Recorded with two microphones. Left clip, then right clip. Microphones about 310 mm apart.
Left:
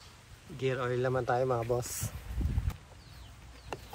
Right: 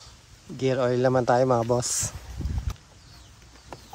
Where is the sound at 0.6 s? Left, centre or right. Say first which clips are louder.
Right 9 dB; centre.